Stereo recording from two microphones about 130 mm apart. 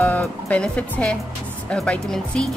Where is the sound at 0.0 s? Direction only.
10° left (ahead or behind).